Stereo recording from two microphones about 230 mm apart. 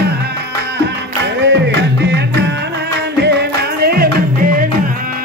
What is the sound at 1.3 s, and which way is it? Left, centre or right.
Music, right.